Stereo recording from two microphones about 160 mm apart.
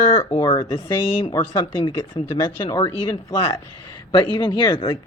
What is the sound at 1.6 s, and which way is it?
Speech, 30° left (ahead or behind).